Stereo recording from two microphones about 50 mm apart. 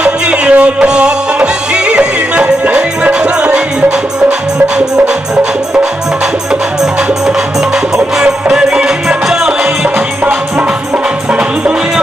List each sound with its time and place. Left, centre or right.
0.0 s music: right
6.8 s music: centre